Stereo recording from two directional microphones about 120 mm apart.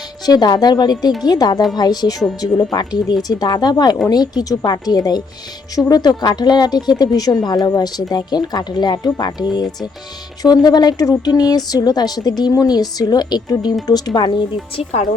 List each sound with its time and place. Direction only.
0.3 s speech: 35° left (ahead or behind)